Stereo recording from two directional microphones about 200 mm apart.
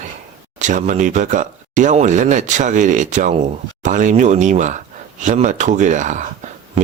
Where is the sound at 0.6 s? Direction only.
40° right (ahead or behind).